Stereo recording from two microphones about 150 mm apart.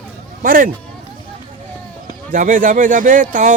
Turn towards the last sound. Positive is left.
turn(degrees=-55)  # may be behind; listen again after turning